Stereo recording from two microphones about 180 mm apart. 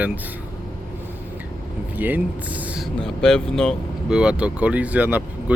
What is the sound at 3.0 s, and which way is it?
Speech, 5° left (ahead or behind).